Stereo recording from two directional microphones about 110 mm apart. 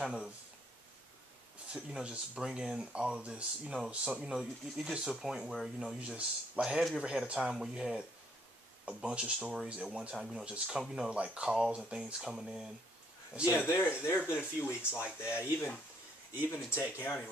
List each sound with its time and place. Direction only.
0.0 s speech: 5° right (ahead or behind)
1.7 s speech: 10° right (ahead or behind)
13.5 s speech: 20° left (ahead or behind)